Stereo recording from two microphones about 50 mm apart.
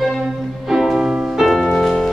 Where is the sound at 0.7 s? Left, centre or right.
Centre.